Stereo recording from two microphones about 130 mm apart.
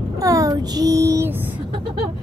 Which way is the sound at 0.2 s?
25° right (ahead or behind).